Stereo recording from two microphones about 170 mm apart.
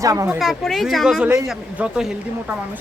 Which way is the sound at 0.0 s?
20° right (ahead or behind).